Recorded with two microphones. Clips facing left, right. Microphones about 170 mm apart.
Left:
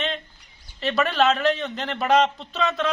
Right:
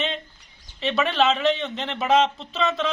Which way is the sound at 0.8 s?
Centre (ahead or behind).